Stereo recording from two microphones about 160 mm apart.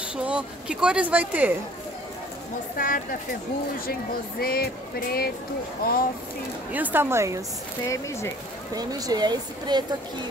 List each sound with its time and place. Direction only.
0.2 s speech: 5° right (ahead or behind)
2.8 s speech: 60° left (ahead or behind)
4.4 s speech: 70° left (ahead or behind)
6.7 s speech: 10° right (ahead or behind)
7.9 s speech: 15° left (ahead or behind)
8.7 s speech: 25° right (ahead or behind)